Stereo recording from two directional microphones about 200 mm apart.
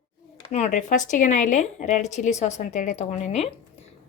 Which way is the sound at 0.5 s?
35° left (ahead or behind).